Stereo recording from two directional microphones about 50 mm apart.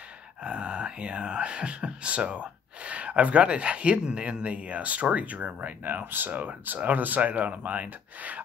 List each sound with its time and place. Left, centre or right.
0.4 s speech: right